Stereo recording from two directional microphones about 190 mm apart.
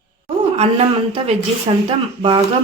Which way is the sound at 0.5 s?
35° right (ahead or behind).